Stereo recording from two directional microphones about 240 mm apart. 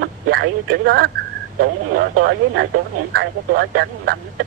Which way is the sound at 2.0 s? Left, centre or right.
Right.